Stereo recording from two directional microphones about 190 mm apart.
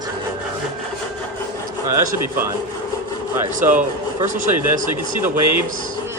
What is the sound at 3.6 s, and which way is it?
A man's voice, 45° right (ahead or behind).